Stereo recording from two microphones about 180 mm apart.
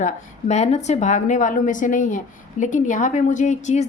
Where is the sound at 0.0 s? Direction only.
40° left (ahead or behind).